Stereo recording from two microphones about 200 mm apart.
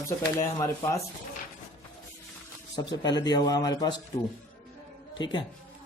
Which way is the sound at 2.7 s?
20° left (ahead or behind).